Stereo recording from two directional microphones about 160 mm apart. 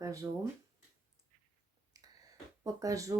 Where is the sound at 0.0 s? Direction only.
20° right (ahead or behind).